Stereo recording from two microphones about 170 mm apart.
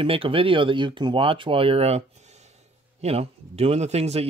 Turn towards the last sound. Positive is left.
turn(degrees=-40)  # may be behind; listen again after turning